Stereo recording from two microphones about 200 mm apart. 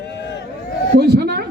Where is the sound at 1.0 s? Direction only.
50° right (ahead or behind).